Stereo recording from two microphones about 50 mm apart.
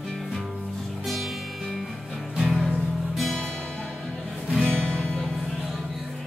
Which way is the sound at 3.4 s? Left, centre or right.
Centre.